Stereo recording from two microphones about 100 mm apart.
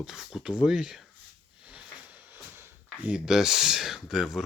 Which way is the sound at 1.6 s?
15° right (ahead or behind).